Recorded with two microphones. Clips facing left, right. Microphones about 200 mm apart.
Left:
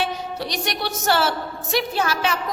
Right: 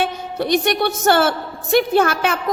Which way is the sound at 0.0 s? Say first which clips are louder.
Right 4 dB; 55° right (ahead or behind).